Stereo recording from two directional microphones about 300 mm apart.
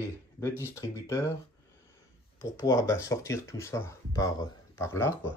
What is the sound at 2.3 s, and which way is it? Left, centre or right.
Speech, centre.